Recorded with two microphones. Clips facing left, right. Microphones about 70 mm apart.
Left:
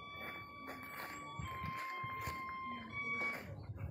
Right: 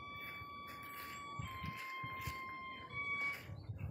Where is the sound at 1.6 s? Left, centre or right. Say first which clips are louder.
Left 6 dB; left.